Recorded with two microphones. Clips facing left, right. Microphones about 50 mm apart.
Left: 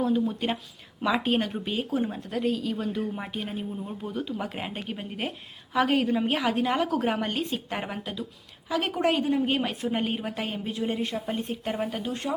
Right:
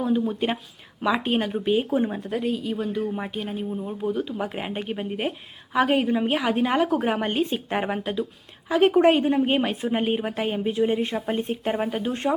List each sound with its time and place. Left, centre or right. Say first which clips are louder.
0.0 s speech: right 2 dB; centre
1.7 s a woman's voice: right 7 dB; centre
2.3 s a woman's voice: right 2 dB; centre; by 12.3 s right